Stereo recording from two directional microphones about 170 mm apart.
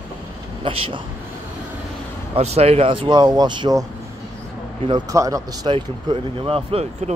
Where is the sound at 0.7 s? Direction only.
30° right (ahead or behind).